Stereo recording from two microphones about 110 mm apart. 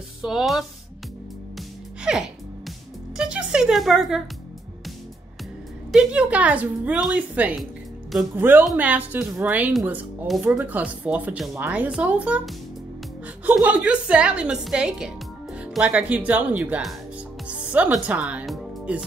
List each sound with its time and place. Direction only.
0.2 s speech: 5° right (ahead or behind)
2.1 s music: 10° right (ahead or behind)
5.9 s a woman's voice: 5° right (ahead or behind)
13.5 s a woman's voice: 15° right (ahead or behind)
17.5 s music: 10° right (ahead or behind)
18.0 s a woman's voice: 10° right (ahead or behind)
18.4 s music: centre (ahead or behind)
18.9 s a woman's voice: 10° right (ahead or behind)